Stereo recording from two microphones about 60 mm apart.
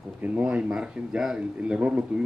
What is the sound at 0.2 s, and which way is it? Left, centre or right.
Speech, centre.